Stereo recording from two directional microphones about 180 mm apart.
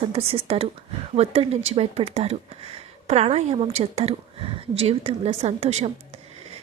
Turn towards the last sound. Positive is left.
turn(degrees=-35)  # may be behind; listen again after turning